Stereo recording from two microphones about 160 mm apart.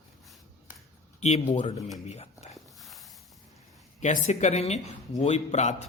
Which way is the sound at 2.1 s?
45° left (ahead or behind).